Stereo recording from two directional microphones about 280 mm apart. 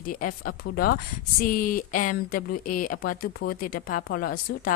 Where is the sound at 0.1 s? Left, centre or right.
Left.